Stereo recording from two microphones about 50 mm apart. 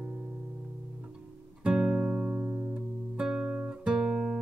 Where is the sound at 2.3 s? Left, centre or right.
Right.